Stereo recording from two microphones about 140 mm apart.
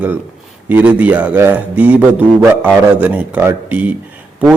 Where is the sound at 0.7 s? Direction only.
10° right (ahead or behind).